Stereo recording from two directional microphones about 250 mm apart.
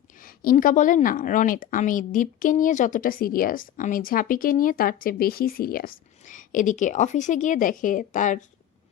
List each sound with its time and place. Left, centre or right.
0.2 s a woman's voice: left